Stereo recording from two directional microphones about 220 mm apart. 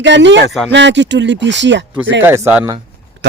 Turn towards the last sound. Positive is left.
turn(degrees=-55)  # may be behind; listen again after turning